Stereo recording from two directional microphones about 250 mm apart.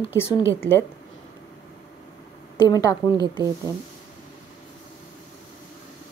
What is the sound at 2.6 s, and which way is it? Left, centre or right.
Speech, centre.